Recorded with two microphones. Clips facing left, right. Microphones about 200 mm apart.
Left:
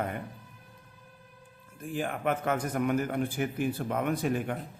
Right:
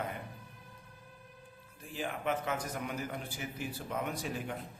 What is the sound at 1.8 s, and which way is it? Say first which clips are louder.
A man's voice: left 5 dB; 50° left (ahead or behind).